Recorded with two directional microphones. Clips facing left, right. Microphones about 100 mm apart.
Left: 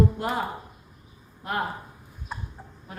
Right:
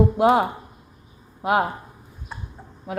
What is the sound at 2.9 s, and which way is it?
Speech, 90° right.